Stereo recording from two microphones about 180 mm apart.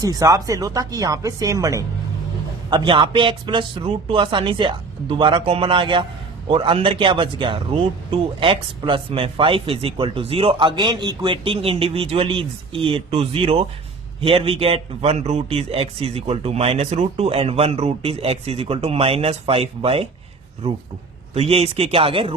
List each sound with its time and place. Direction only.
0.0 s a man's voice: 20° right (ahead or behind)
21.3 s a man's voice: 35° right (ahead or behind)